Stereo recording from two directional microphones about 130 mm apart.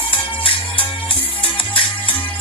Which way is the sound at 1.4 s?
40° left (ahead or behind).